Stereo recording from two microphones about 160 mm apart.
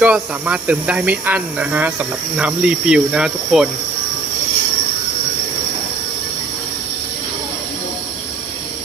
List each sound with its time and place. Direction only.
0.0 s speech: 10° right (ahead or behind)